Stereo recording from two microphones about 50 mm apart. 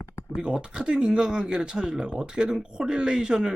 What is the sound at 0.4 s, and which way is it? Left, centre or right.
Speech, centre.